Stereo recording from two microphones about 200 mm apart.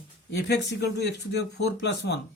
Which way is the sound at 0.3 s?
55° left (ahead or behind).